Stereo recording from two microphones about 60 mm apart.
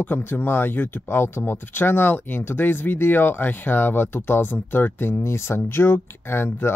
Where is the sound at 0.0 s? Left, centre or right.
Left.